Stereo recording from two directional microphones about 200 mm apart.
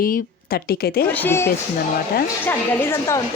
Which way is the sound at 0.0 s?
50° left (ahead or behind).